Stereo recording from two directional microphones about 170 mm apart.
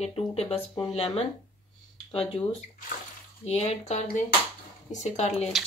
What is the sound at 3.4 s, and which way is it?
Speech, 40° left (ahead or behind).